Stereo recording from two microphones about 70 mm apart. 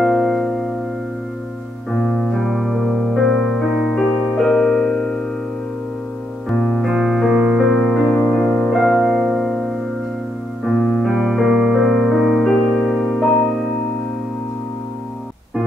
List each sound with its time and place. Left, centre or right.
0.0 s music: centre
1.9 s music: centre
4.0 s music: centre
6.5 s piano: centre
6.8 s keyboard: centre
7.3 s music: centre
7.6 s music: centre
9.0 s music: centre
11.5 s music: centre
11.8 s music: centre